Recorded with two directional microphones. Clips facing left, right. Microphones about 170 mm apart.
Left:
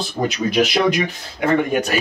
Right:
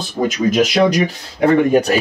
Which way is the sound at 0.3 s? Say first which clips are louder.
Right 3 dB; 45° right (ahead or behind).